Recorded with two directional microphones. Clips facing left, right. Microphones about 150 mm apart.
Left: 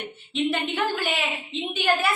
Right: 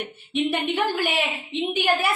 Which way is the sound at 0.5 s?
10° right (ahead or behind).